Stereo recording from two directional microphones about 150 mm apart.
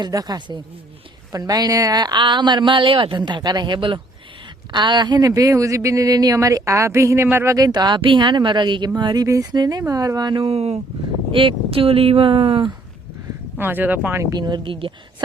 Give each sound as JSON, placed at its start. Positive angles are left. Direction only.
{"t": 0.0, "sound": "speech", "side_deg": -25}
{"t": 13.6, "sound": "speech", "side_deg": -15}
{"t": 14.3, "sound": "speech", "side_deg": -30}